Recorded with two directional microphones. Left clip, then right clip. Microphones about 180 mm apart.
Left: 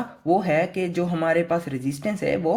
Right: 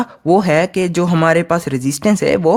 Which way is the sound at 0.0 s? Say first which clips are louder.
Right 8 dB; 55° right (ahead or behind).